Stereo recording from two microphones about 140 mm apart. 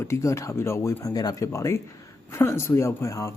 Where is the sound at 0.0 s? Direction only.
20° left (ahead or behind).